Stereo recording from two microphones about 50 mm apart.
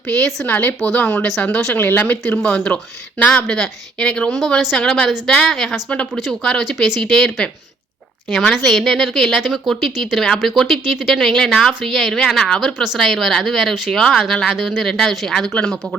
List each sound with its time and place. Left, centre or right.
0.2 s speech: centre
0.4 s speech: left
2.4 s speech: left
4.4 s speech: centre
14.8 s speech: centre